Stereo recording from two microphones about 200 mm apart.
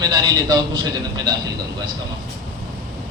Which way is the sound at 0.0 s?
20° right (ahead or behind).